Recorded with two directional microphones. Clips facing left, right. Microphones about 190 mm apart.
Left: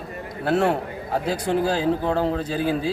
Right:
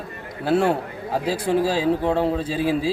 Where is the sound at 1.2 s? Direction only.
30° right (ahead or behind).